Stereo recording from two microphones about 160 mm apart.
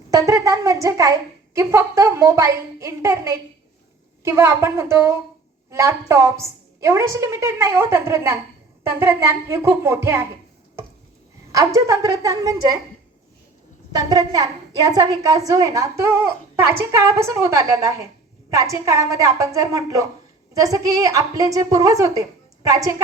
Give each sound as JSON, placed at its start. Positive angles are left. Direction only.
{"t": 0.1, "sound": "a woman's voice", "side_deg": -20}
{"t": 11.5, "sound": "a woman's voice", "side_deg": -20}
{"t": 13.9, "sound": "a woman's voice", "side_deg": -25}